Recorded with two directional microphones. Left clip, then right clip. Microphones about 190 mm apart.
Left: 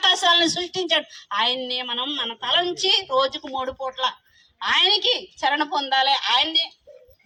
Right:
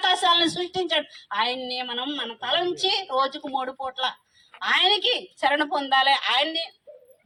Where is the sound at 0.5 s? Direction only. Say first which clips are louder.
Left 2 dB; 35° right (ahead or behind).